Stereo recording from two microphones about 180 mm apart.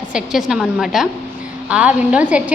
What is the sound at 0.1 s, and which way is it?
A woman's voice, 5° right (ahead or behind).